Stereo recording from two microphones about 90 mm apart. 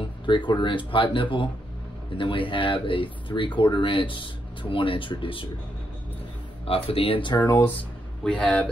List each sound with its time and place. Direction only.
0.5 s speech: 60° left (ahead or behind)
6.6 s speech: 90° left; by 7.5 s 55° left (ahead or behind)
8.2 s speech: 15° left (ahead or behind)